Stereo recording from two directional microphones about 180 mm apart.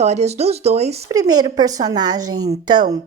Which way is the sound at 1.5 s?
20° right (ahead or behind).